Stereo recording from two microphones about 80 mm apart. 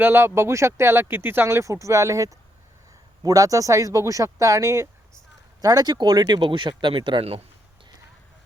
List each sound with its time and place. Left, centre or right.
0.0 s speech: right
5.6 s speech: right